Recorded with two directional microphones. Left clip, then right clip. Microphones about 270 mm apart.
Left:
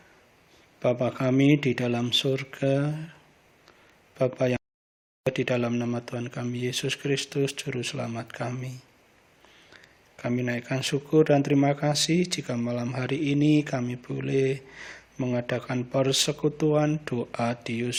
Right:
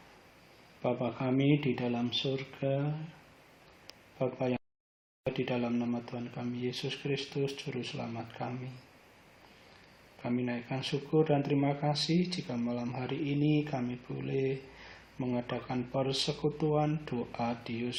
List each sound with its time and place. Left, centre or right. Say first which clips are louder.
0.8 s speech: left 8 dB; left
4.2 s speech: left 8 dB; left
10.2 s speech: left 6 dB; left